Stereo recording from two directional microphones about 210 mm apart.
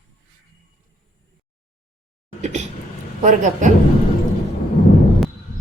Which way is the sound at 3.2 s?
35° right (ahead or behind).